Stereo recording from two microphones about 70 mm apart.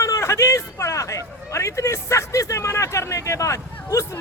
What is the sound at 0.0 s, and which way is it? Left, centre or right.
A man's voice, left.